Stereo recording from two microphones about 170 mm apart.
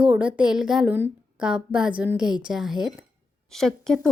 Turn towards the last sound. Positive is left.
turn(degrees=5)  # may be behind; listen again after turning